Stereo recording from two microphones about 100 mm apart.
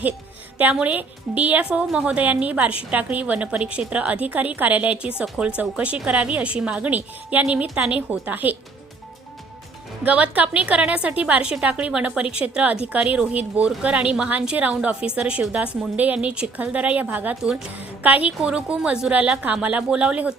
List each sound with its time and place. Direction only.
0.6 s speech: 10° right (ahead or behind)
10.0 s speech: 15° right (ahead or behind)